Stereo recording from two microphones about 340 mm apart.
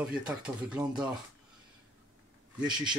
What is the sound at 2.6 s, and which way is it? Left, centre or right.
Speech, centre.